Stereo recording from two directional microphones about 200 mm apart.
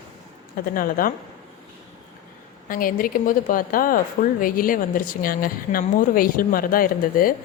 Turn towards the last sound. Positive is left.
turn(degrees=45)  # may be behind; listen again after turning